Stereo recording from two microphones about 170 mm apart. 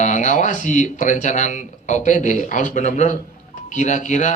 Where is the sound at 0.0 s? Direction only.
45° left (ahead or behind).